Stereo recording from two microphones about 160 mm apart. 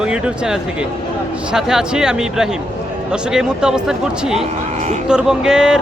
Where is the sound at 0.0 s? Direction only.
5° right (ahead or behind).